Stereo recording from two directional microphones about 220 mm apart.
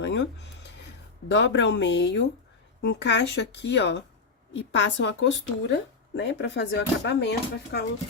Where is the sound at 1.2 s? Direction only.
55° left (ahead or behind).